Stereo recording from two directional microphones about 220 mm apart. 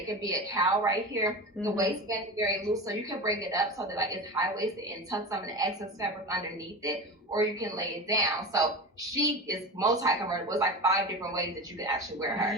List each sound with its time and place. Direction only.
0.2 s speech: 15° right (ahead or behind)